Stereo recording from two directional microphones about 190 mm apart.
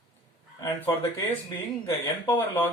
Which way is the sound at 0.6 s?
10° left (ahead or behind).